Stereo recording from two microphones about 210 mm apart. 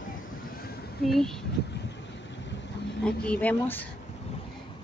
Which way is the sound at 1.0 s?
Centre (ahead or behind).